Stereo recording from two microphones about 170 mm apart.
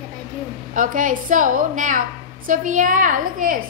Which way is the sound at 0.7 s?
50° right (ahead or behind).